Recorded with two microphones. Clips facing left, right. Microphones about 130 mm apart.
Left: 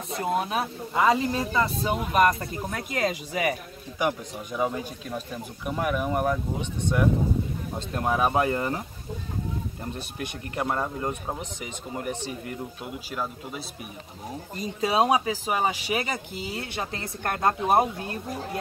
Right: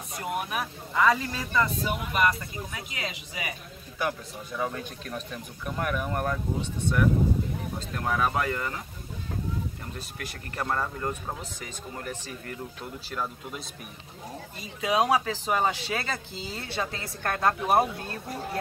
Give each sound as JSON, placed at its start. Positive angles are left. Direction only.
{"t": 0.1, "sound": "speech", "side_deg": 25}
{"t": 4.0, "sound": "speech", "side_deg": 15}
{"t": 9.9, "sound": "speech", "side_deg": 20}
{"t": 14.6, "sound": "speech", "side_deg": 35}
{"t": 15.0, "sound": "speech", "side_deg": 15}